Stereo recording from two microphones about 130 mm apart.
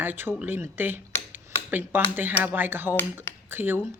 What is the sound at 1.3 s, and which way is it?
Cutlery, 15° right (ahead or behind).